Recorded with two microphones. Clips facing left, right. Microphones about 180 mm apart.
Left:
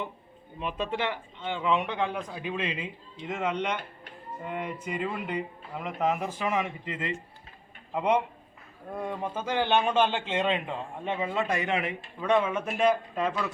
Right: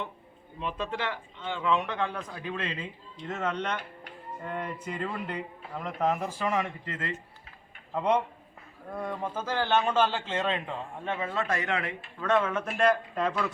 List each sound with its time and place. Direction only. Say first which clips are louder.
0.6 s a man's voice: left 2 dB; 15° left (ahead or behind)